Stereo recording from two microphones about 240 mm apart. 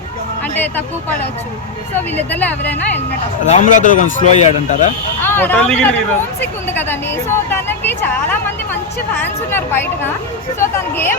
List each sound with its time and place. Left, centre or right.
0.5 s a woman's voice: centre
2.1 s a woman's voice: centre
3.4 s speech: left
5.2 s a woman's voice: centre